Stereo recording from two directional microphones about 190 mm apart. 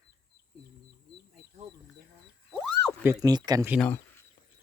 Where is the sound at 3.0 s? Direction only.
15° right (ahead or behind).